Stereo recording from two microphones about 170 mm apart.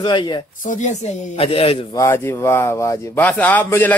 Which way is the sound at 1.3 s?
35° left (ahead or behind).